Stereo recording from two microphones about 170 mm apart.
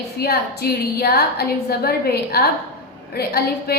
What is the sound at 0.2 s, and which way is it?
A woman's voice, 70° left (ahead or behind).